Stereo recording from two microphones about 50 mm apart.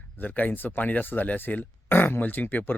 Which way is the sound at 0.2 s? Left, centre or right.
Left.